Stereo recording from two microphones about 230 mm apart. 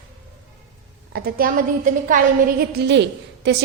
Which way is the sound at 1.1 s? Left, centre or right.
Right.